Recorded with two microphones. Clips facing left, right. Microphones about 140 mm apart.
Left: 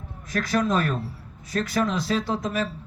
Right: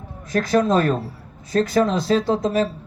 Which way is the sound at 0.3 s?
30° right (ahead or behind).